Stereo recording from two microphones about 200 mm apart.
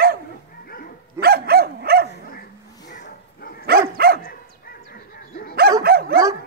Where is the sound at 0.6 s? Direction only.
45° left (ahead or behind).